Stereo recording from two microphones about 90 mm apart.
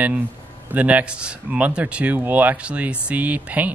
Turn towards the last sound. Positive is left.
turn(degrees=-15)  # may be behind; listen again after turning